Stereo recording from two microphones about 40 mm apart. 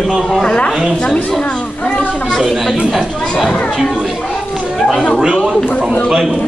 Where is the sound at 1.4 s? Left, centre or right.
Left.